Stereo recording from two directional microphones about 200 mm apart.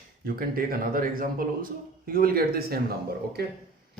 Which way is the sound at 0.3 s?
45° right (ahead or behind).